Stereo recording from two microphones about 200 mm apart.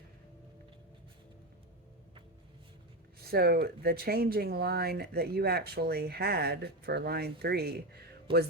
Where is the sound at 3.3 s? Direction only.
50° right (ahead or behind).